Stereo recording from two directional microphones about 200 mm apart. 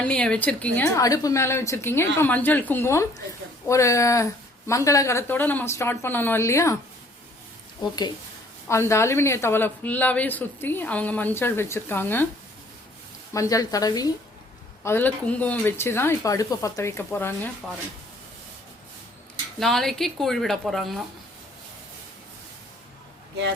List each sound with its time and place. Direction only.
0.0 s a woman's voice: 5° left (ahead or behind)
7.8 s a woman's voice: 20° left (ahead or behind)
13.3 s a woman's voice: 15° left (ahead or behind)
19.5 s speech: centre (ahead or behind)